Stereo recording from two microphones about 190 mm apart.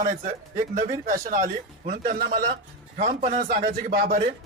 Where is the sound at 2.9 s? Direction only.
40° right (ahead or behind).